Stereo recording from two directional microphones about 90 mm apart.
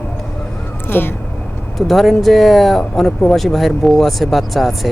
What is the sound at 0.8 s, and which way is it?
Speech, 25° left (ahead or behind).